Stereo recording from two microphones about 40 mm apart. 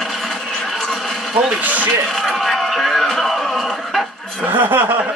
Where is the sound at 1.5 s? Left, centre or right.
Right.